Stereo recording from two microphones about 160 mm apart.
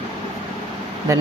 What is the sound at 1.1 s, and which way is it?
Speech, 20° right (ahead or behind).